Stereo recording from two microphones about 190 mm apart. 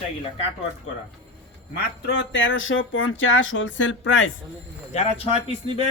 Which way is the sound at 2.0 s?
65° left (ahead or behind).